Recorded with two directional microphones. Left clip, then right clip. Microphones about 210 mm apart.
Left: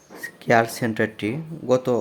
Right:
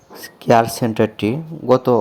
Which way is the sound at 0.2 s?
15° right (ahead or behind).